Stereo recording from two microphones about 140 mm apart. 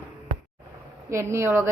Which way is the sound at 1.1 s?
20° right (ahead or behind).